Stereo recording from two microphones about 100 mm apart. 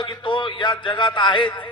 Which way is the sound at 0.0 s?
50° left (ahead or behind).